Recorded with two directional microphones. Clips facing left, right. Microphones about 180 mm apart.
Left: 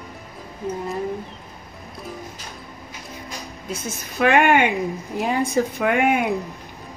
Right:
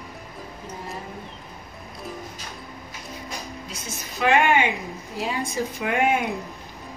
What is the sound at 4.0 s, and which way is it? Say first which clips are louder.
Speech: left 3 dB; 55° left (ahead or behind).